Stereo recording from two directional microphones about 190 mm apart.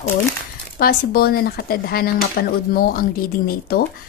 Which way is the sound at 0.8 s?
55° left (ahead or behind).